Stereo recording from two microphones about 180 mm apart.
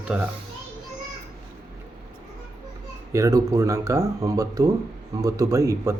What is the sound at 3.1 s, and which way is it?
Speech, 15° right (ahead or behind).